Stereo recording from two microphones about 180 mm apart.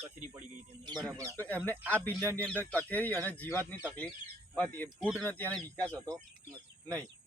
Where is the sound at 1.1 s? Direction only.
15° right (ahead or behind).